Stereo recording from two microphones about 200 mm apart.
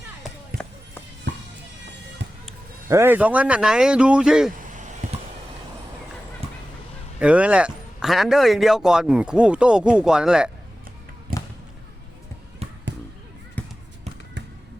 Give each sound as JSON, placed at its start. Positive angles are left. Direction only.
{"t": 2.2, "sound": "music", "side_deg": -65}
{"t": 2.9, "sound": "a man's voice", "side_deg": -10}
{"t": 5.0, "sound": "a sound", "side_deg": -40}
{"t": 6.4, "sound": "honk", "side_deg": -30}
{"t": 7.2, "sound": "a man's voice", "side_deg": -5}
{"t": 11.3, "sound": "basketball bounce", "side_deg": -45}
{"t": 13.6, "sound": "basketball bounce", "side_deg": 10}